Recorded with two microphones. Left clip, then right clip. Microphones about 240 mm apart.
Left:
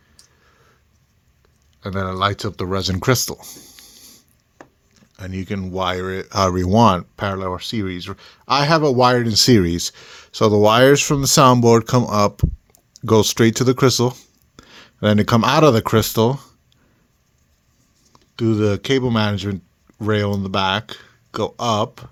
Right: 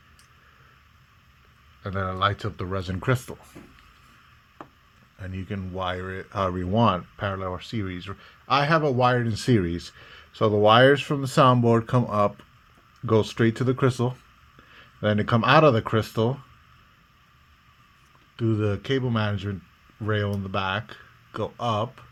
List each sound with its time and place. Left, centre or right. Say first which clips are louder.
1.8 s speech: left 5 dB; left
3.8 s a sound: left 9 dB; left
5.1 s speech: left 8 dB; left
18.3 s speech: left 8 dB; left